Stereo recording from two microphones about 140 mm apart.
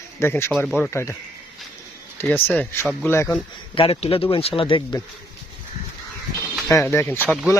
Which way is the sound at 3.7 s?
45° left (ahead or behind).